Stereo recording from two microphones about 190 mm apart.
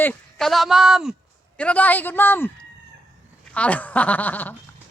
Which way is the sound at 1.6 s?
5° left (ahead or behind).